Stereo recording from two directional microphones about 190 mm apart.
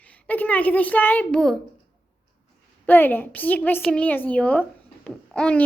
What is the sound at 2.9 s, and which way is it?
A woman's voice, 10° left (ahead or behind).